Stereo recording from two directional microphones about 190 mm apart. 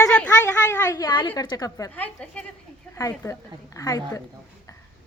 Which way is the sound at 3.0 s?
15° left (ahead or behind).